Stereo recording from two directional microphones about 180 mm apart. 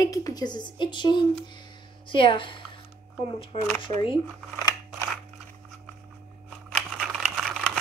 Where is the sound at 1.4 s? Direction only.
25° left (ahead or behind).